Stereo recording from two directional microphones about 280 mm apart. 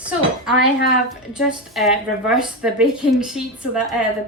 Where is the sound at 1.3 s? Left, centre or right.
Centre.